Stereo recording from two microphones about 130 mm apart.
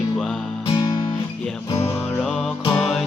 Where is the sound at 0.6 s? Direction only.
30° left (ahead or behind).